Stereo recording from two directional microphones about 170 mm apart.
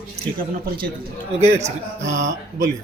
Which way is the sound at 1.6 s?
45° right (ahead or behind).